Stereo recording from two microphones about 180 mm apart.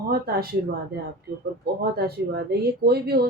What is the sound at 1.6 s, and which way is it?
Speech, 60° right (ahead or behind).